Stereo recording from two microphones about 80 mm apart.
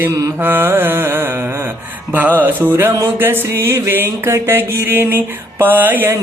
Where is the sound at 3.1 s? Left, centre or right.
Right.